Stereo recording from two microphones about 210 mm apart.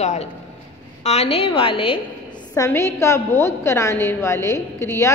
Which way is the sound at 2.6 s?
15° left (ahead or behind).